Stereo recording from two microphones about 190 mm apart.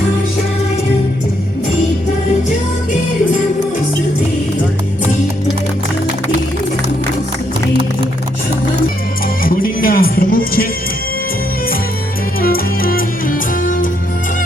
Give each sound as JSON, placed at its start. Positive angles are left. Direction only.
{"t": 9.4, "sound": "music", "side_deg": 50}
{"t": 12.4, "sound": "music", "side_deg": 50}